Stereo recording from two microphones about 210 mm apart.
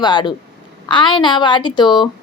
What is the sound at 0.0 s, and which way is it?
A woman's voice, 20° left (ahead or behind).